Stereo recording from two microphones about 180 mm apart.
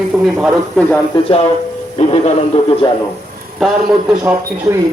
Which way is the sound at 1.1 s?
30° left (ahead or behind).